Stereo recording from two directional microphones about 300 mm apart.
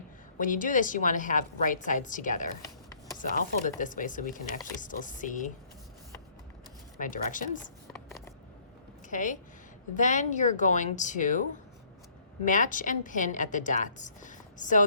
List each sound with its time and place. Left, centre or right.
0.3 s a woman's voice: left
7.0 s a woman's voice: left
9.0 s a woman's voice: left
12.5 s a woman's voice: left